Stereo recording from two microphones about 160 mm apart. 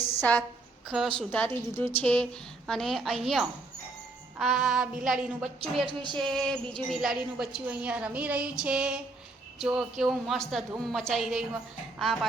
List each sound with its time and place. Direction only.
0.2 s a woman's voice: 10° left (ahead or behind)
5.8 s a sound: 30° right (ahead or behind)
6.1 s a woman's voice: 5° left (ahead or behind)